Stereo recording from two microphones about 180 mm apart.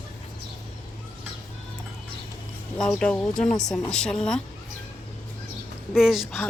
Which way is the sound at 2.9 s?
5° left (ahead or behind).